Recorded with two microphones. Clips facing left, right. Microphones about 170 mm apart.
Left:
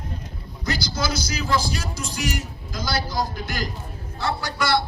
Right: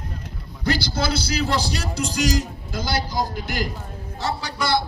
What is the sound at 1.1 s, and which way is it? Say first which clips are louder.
Speech: even; 30° right (ahead or behind).